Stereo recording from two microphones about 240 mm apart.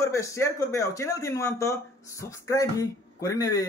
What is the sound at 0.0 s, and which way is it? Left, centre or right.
Speech, centre.